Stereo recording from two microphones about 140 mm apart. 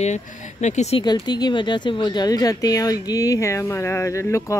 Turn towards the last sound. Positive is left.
turn(degrees=20)  # may be behind; listen again after turning